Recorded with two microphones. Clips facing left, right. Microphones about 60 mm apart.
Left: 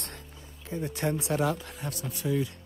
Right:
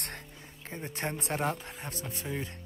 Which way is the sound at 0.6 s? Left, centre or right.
Right.